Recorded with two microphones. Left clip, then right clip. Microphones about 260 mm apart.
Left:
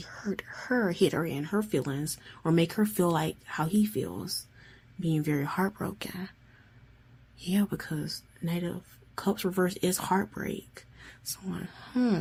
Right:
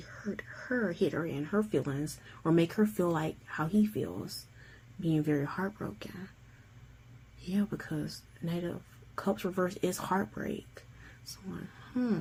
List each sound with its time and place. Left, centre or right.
0.0 s speech: left
7.4 s speech: left